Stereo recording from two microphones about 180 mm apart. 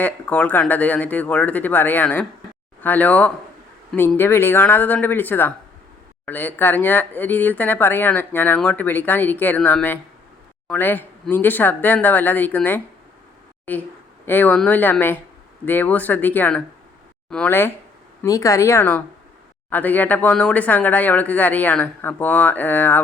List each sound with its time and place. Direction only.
0.0 s speech: 10° left (ahead or behind)